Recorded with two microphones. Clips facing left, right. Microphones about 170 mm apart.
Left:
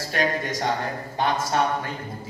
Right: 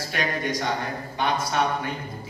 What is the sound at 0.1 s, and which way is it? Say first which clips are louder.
Speech: left 2 dB; 40° left (ahead or behind).